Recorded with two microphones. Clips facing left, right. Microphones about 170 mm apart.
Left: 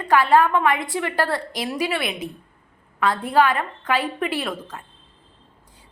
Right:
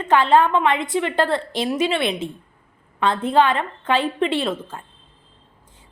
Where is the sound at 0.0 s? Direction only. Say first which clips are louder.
Right 1 dB; 25° right (ahead or behind).